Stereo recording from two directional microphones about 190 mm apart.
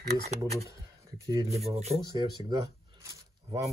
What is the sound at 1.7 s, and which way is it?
Speech, 35° right (ahead or behind).